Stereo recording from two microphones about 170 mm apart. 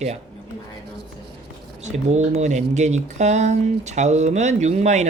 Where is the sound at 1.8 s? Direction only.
40° right (ahead or behind).